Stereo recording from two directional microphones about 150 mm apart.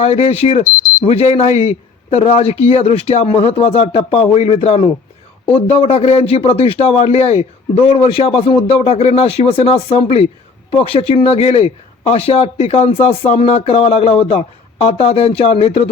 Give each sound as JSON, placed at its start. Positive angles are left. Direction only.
{"t": 0.0, "sound": "a man's voice", "side_deg": 45}